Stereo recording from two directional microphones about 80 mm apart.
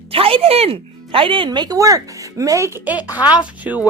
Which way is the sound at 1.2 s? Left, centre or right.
Right.